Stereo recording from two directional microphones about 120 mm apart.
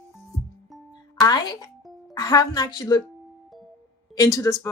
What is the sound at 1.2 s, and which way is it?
A woman's voice, 35° left (ahead or behind).